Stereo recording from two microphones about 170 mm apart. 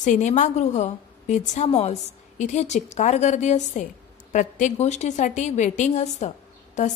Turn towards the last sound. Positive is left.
turn(degrees=45)  # may be behind; listen again after turning